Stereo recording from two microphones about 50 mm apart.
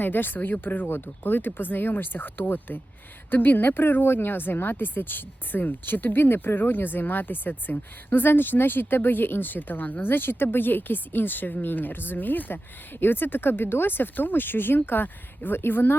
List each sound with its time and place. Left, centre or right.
0.0 s speech: left